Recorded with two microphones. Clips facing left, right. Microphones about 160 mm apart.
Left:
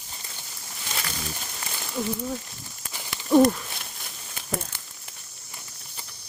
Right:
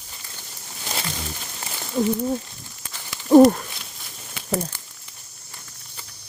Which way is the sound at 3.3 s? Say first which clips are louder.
Right 6 dB; 50° right (ahead or behind).